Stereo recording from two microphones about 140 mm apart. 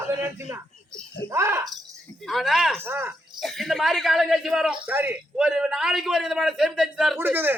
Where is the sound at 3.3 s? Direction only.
Centre (ahead or behind).